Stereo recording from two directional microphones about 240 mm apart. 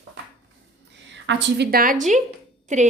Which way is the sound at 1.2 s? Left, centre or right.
Right.